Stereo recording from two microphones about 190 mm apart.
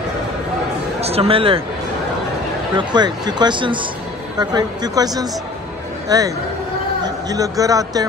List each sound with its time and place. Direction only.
1.0 s speech: 30° right (ahead or behind)
2.9 s a man's voice: 20° right (ahead or behind)